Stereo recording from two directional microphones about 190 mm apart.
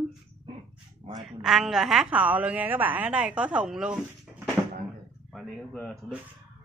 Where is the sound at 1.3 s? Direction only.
Centre (ahead or behind).